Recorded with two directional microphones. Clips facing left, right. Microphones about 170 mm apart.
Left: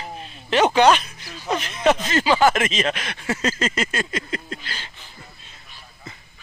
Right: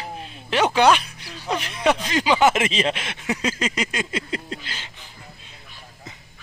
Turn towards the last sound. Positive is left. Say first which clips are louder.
# even
turn(degrees=-20)  # may be behind; listen again after turning